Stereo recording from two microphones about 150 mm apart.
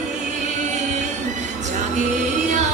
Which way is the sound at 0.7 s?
50° right (ahead or behind).